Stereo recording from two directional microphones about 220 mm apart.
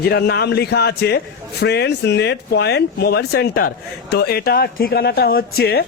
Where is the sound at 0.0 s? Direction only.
45° left (ahead or behind).